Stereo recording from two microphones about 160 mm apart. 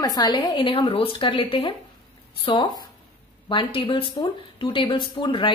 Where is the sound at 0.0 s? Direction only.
25° left (ahead or behind).